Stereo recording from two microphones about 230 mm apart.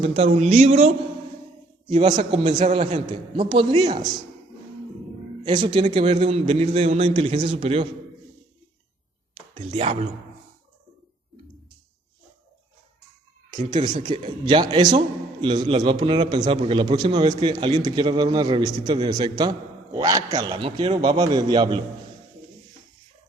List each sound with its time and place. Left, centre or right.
0.0 s a man's voice: right
1.9 s a man's voice: right
5.4 s a man's voice: right
9.6 s a man's voice: right
13.7 s a man's voice: centre